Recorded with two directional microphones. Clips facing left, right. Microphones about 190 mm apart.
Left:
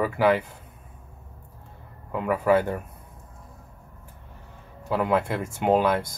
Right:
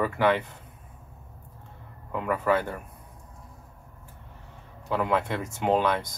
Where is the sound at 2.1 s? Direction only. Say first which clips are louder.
Left 4 dB; 10° left (ahead or behind).